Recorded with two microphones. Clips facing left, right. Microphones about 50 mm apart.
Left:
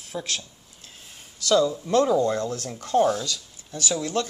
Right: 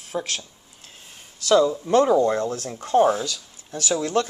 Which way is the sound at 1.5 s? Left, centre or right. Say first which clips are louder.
Right 3 dB; right.